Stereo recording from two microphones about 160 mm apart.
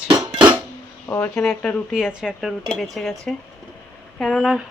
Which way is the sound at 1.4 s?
5° left (ahead or behind).